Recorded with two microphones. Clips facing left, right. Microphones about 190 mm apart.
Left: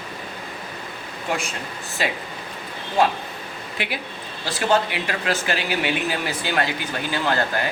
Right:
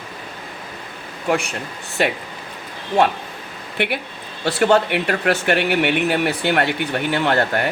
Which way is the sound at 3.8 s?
60° right (ahead or behind).